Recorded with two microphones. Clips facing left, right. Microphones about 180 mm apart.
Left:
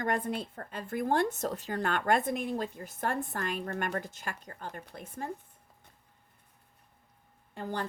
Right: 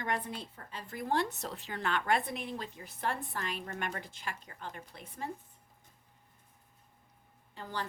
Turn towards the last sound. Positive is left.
turn(degrees=50)  # may be behind; listen again after turning